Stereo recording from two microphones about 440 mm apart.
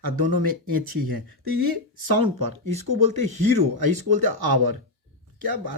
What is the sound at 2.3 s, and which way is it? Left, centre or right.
Speech, right.